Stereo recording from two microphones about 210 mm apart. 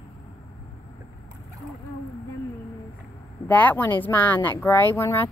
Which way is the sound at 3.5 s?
10° left (ahead or behind).